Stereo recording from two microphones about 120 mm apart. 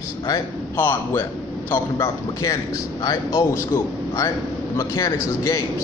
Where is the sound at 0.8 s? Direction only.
15° left (ahead or behind).